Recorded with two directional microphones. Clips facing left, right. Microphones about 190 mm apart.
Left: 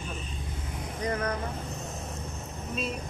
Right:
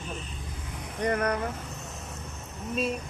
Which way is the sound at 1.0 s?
65° right (ahead or behind).